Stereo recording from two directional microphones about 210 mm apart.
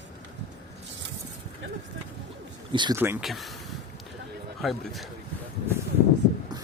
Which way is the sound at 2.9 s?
10° right (ahead or behind).